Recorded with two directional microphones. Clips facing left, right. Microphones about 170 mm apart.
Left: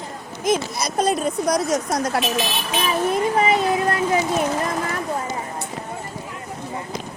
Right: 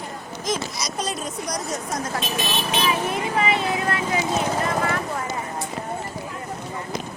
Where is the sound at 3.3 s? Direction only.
40° left (ahead or behind).